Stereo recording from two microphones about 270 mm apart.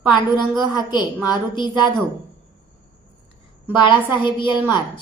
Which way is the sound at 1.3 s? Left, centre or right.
Centre.